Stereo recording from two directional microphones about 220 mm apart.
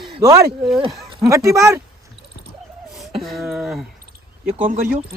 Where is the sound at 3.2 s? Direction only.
Centre (ahead or behind).